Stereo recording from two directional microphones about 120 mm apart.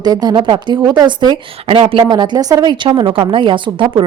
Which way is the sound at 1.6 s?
50° right (ahead or behind).